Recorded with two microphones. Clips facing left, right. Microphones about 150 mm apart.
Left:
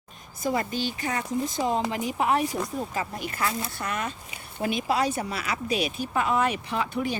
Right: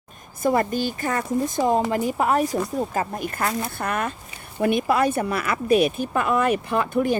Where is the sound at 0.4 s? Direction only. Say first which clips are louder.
Right 6 dB; 50° right (ahead or behind).